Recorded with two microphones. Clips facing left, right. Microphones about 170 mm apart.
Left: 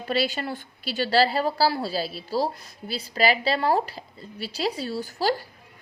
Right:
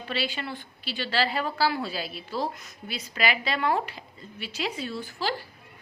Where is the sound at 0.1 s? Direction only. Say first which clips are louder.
Left 6 dB; 40° left (ahead or behind).